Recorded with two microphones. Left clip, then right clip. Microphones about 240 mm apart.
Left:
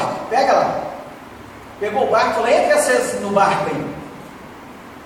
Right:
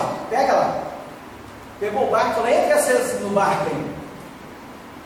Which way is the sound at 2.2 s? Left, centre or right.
Centre.